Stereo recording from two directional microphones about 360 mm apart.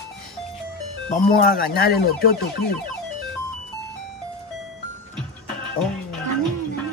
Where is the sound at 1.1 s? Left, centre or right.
Left.